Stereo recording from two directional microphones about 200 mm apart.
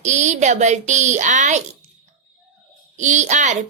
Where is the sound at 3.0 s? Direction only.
35° right (ahead or behind).